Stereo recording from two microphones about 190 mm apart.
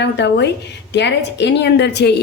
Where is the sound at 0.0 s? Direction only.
65° left (ahead or behind).